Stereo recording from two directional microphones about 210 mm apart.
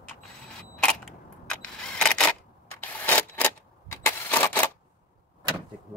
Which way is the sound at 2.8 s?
10° left (ahead or behind).